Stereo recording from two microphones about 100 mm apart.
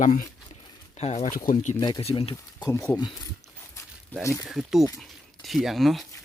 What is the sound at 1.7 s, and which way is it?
Speech, 45° left (ahead or behind).